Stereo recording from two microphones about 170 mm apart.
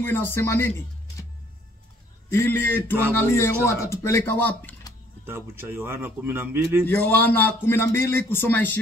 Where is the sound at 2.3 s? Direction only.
15° left (ahead or behind).